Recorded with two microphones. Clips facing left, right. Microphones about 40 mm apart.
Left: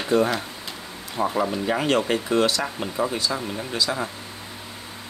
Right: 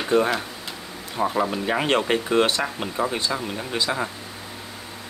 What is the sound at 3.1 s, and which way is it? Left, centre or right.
Speech, right.